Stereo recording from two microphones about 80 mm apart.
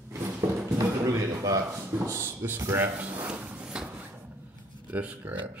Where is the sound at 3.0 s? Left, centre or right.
Right.